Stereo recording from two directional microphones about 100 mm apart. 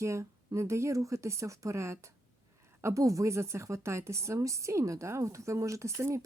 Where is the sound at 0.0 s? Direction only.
30° right (ahead or behind).